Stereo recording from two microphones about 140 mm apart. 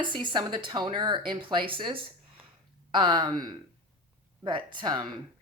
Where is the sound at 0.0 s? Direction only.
35° right (ahead or behind).